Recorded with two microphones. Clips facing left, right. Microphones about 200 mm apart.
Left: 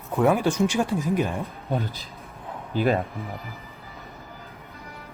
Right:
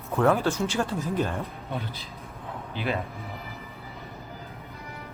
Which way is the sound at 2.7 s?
40° left (ahead or behind).